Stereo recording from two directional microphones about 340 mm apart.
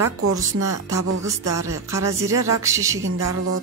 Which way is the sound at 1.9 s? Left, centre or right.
Centre.